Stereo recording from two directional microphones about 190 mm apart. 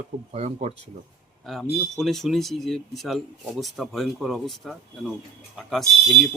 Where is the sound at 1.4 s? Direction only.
Centre (ahead or behind).